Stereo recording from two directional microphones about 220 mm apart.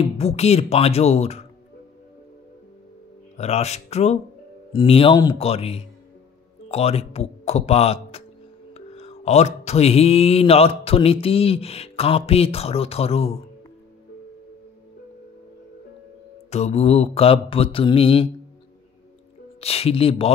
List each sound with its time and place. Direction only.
0.0 s speech: 30° left (ahead or behind)
3.3 s speech: 30° left (ahead or behind)
16.4 s speech: 30° left (ahead or behind)
19.6 s speech: 25° left (ahead or behind)